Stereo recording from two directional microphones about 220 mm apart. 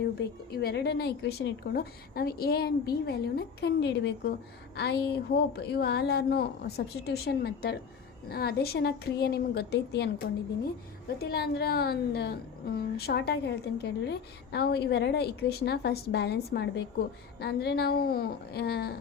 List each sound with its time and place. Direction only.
0.0 s a woman's voice: 45° left (ahead or behind)
11.2 s a woman's voice: 45° left (ahead or behind)